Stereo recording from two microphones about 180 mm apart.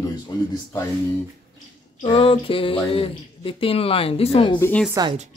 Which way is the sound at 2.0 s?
30° left (ahead or behind).